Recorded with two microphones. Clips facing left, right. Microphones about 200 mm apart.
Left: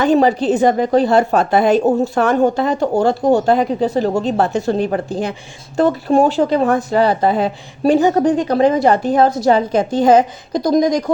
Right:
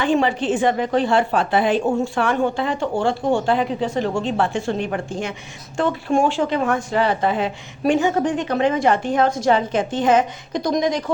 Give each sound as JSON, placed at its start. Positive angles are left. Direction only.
{"t": 0.0, "sound": "speech", "side_deg": 40}